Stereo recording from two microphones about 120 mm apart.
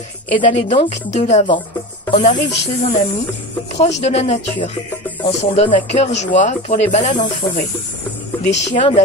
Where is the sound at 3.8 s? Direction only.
65° left (ahead or behind).